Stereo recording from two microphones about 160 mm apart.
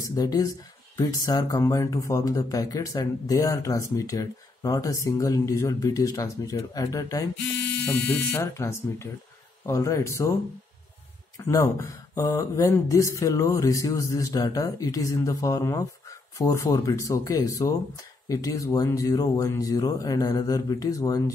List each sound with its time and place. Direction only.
0.0 s speech: 25° left (ahead or behind)
11.3 s speech: 20° left (ahead or behind)